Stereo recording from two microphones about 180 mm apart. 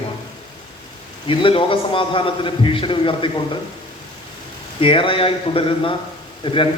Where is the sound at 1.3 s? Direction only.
30° left (ahead or behind).